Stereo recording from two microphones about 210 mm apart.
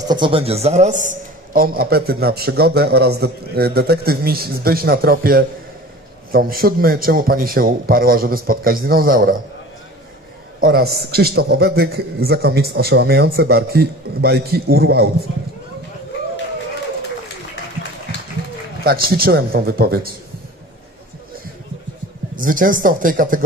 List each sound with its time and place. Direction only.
0.1 s a man's voice: 25° right (ahead or behind); by 9.3 s 45° right (ahead or behind)
10.6 s a man's voice: 45° right (ahead or behind)
18.9 s a man's voice: 45° right (ahead or behind)
22.4 s speech: 40° right (ahead or behind)